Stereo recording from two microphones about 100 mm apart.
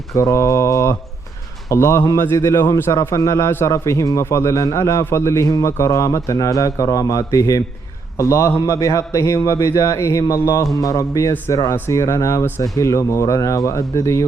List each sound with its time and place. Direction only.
0.1 s mantra: 30° left (ahead or behind)
1.7 s a man's voice: 25° left (ahead or behind)